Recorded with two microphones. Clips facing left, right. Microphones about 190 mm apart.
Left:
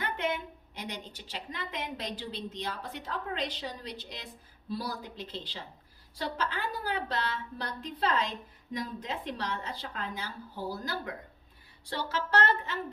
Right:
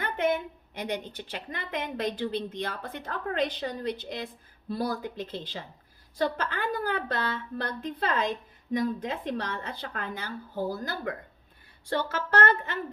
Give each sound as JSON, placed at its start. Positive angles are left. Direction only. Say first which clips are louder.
{"t": 0.0, "sound": "a woman's voice", "louder": "right 6 dB", "side_deg": -50}